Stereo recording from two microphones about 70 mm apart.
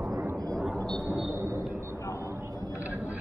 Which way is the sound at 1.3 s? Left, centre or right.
Right.